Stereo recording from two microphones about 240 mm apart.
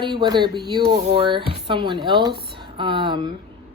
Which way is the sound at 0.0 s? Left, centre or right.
Centre.